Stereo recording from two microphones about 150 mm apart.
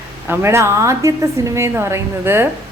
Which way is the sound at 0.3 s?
20° right (ahead or behind).